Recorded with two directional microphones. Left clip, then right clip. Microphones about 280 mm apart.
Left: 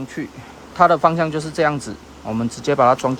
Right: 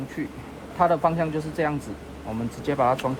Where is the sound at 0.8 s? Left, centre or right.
Left.